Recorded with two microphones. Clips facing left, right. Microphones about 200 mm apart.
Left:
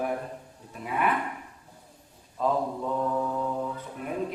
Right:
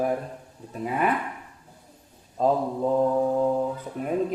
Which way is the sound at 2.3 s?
35° right (ahead or behind).